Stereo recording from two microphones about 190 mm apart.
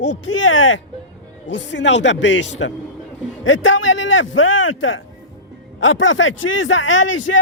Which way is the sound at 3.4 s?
90° left.